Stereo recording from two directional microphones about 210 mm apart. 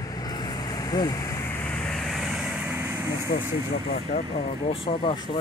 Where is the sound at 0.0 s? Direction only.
20° left (ahead or behind); by 3.3 s 10° right (ahead or behind).